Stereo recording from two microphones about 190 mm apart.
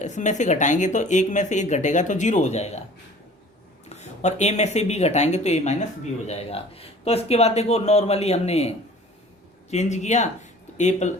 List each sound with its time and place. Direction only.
0.0 s speech: 40° left (ahead or behind)
3.8 s speech: 35° left (ahead or behind)